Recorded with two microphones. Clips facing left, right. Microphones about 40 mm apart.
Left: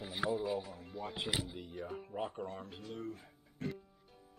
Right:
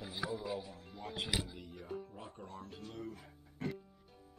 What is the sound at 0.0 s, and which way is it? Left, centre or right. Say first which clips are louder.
Music: left 4 dB; left.